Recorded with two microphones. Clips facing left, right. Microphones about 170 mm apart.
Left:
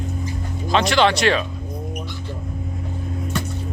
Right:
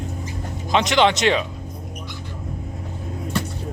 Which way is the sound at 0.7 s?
15° right (ahead or behind).